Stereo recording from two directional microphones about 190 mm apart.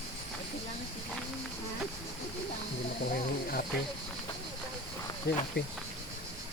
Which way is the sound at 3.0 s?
50° left (ahead or behind).